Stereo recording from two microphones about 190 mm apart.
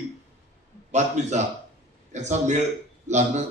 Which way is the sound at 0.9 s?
40° right (ahead or behind).